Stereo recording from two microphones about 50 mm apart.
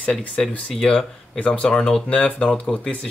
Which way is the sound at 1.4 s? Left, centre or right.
Left.